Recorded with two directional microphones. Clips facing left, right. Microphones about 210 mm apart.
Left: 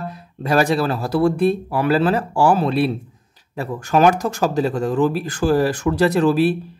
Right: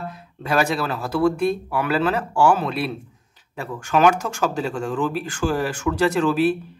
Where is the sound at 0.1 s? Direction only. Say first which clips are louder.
Left 4 dB; 35° left (ahead or behind).